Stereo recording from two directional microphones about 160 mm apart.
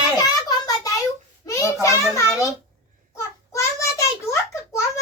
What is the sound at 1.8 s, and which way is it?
Speech, 20° left (ahead or behind).